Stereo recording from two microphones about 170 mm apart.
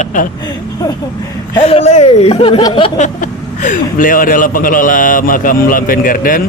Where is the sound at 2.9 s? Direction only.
45° left (ahead or behind).